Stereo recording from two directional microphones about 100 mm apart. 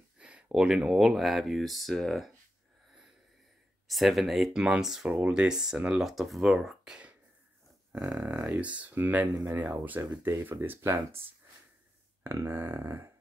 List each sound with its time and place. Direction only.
0.2 s speech: 10° right (ahead or behind)
3.8 s speech: centre (ahead or behind); by 11.1 s 25° right (ahead or behind)
12.2 s speech: 25° right (ahead or behind)